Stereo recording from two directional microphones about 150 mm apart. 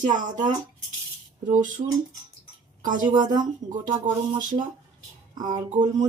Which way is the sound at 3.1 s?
30° right (ahead or behind).